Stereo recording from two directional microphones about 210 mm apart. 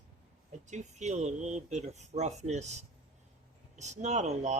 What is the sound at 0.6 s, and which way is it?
Speech, 35° right (ahead or behind).